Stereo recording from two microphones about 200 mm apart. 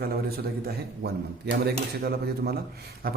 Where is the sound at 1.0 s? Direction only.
55° right (ahead or behind).